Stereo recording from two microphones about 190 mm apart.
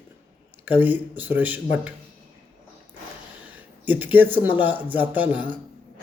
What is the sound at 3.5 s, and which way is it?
Speech, 10° right (ahead or behind).